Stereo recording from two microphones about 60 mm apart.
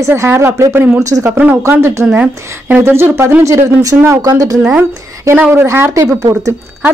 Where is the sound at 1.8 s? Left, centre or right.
Right.